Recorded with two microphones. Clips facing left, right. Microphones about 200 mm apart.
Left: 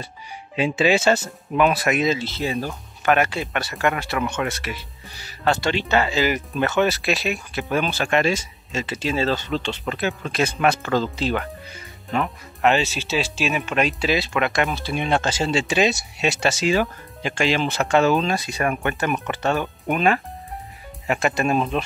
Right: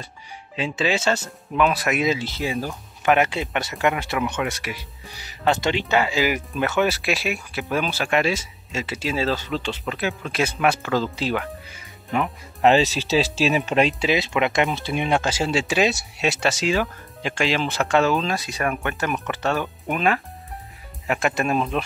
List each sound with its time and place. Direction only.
0.6 s speech: 10° left (ahead or behind); by 2.5 s 15° right (ahead or behind)
2.5 s speech: centre (ahead or behind)
3.0 s speech: 15° right (ahead or behind)
12.6 s speech: 35° right (ahead or behind); by 21.8 s centre (ahead or behind)